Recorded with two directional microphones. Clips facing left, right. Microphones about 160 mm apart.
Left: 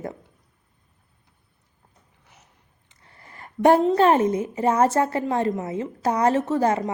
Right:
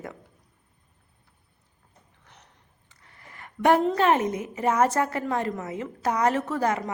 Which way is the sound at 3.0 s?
35° left (ahead or behind).